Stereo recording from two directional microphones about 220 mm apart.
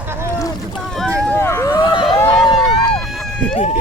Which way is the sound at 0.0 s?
10° right (ahead or behind).